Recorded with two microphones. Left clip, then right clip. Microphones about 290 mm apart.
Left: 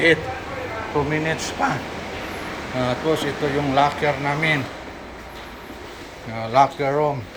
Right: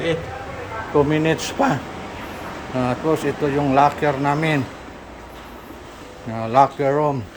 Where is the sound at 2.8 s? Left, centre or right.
Centre.